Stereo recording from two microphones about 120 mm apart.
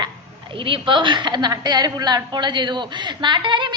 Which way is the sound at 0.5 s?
45° right (ahead or behind).